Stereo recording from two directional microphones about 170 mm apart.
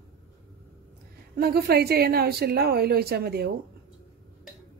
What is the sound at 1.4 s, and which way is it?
A woman's voice, 65° right (ahead or behind).